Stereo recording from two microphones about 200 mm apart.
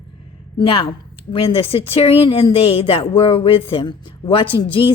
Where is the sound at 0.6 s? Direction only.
25° left (ahead or behind).